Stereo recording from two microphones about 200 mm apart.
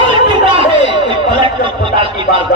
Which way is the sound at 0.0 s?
25° right (ahead or behind).